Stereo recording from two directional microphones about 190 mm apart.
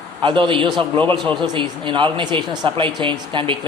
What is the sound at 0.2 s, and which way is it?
A man's voice, 25° right (ahead or behind).